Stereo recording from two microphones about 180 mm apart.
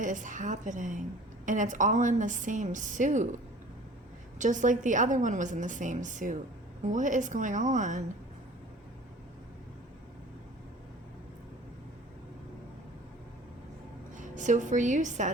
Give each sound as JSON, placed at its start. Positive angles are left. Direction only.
{"t": 0.0, "sound": "a woman's voice", "side_deg": -45}
{"t": 4.4, "sound": "a woman's voice", "side_deg": -45}
{"t": 14.2, "sound": "a woman's voice", "side_deg": -45}